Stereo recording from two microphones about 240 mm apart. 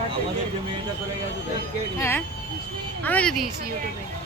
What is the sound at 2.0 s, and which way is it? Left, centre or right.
Speech, centre.